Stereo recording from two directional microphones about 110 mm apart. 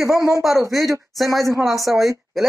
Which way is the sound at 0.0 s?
30° right (ahead or behind).